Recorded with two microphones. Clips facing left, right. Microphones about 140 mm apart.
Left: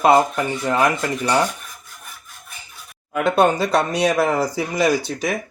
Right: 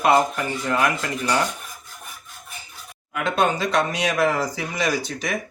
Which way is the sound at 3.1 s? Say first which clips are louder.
Left 5 dB; 35° left (ahead or behind).